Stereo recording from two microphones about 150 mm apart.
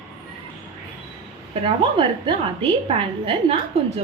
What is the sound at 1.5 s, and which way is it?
A woman's voice, 35° right (ahead or behind).